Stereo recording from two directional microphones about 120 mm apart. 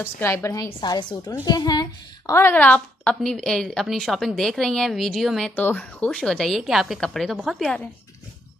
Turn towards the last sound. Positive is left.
turn(degrees=5)  # may be behind; listen again after turning